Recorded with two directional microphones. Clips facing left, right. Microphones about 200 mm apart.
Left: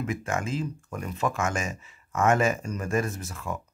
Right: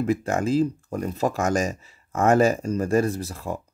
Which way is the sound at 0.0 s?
35° right (ahead or behind).